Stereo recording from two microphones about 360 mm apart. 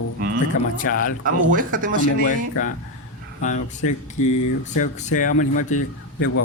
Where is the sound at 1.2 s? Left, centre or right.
Right.